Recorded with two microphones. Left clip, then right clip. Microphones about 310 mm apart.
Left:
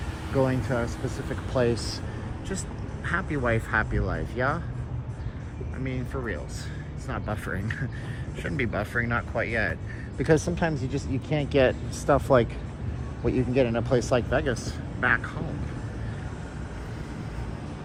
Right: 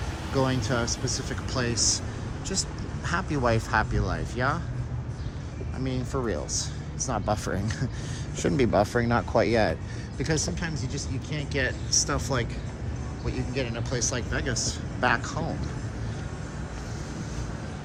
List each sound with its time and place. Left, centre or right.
0.3 s speech: centre
3.1 s speech: centre
5.8 s speech: centre
10.2 s speech: centre